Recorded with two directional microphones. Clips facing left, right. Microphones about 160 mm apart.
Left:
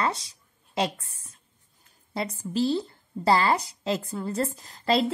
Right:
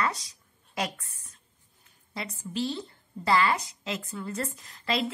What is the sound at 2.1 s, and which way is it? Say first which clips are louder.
A woman's voice: left 6 dB; 35° left (ahead or behind).